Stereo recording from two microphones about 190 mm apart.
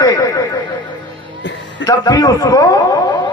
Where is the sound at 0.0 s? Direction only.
20° left (ahead or behind).